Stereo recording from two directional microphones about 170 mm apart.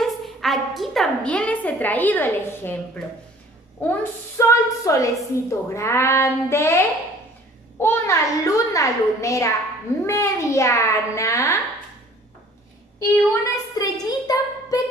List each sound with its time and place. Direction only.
0.0 s a woman's voice: centre (ahead or behind); by 11.6 s 20° left (ahead or behind)
13.0 s a woman's voice: 15° left (ahead or behind)